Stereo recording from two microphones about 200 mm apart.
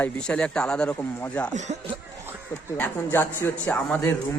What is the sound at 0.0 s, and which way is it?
A man's voice, 5° left (ahead or behind).